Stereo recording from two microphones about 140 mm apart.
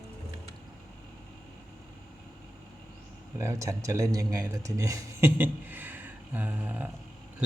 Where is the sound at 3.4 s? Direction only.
20° right (ahead or behind).